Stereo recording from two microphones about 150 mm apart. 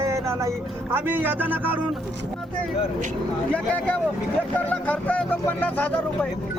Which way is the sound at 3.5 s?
10° left (ahead or behind).